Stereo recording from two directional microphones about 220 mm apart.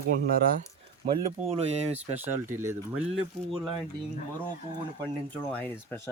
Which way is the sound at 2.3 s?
10° right (ahead or behind).